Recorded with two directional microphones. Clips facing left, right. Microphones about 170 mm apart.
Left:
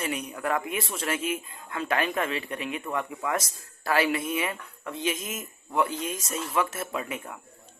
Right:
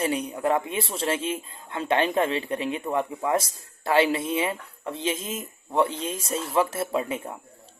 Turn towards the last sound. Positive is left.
turn(degrees=-30)  # may be behind; listen again after turning